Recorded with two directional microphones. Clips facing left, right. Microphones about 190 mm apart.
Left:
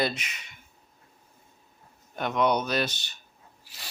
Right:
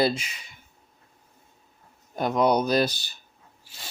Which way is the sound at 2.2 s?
35° right (ahead or behind).